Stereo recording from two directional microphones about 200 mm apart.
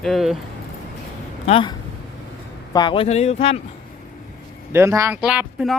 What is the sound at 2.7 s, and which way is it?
Speech, 25° left (ahead or behind).